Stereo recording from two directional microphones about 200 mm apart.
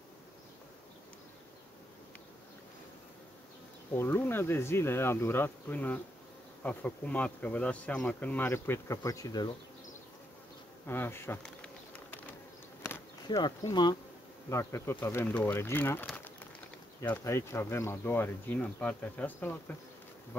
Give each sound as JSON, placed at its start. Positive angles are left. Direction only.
{"t": 3.9, "sound": "speech", "side_deg": 10}
{"t": 10.9, "sound": "speech", "side_deg": 10}
{"t": 11.4, "sound": "bee", "side_deg": 5}
{"t": 14.5, "sound": "speech", "side_deg": 15}